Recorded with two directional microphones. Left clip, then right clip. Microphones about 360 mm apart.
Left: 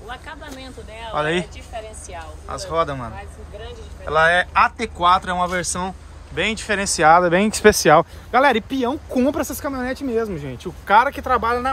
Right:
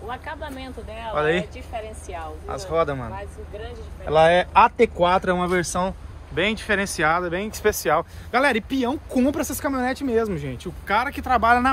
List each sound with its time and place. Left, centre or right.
0.1 s a sound: centre
1.1 s speech: centre
1.8 s a sound: centre
2.4 s speech: centre
4.1 s speech: centre; by 8.1 s left
8.3 s speech: centre